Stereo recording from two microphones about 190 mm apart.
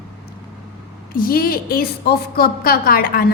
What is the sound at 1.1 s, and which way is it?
A woman's voice, 50° left (ahead or behind).